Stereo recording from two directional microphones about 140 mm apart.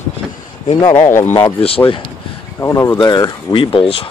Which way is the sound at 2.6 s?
20° left (ahead or behind).